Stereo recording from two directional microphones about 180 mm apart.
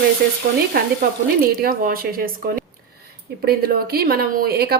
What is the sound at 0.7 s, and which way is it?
Speech, 60° right (ahead or behind).